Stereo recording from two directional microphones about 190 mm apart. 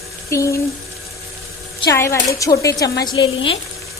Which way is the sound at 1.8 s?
15° left (ahead or behind).